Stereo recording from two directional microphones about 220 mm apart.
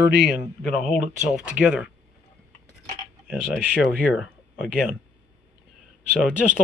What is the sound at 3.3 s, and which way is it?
Speech, 5° right (ahead or behind).